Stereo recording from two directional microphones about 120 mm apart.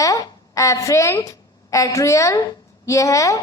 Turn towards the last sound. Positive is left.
turn(degrees=25)  # may be behind; listen again after turning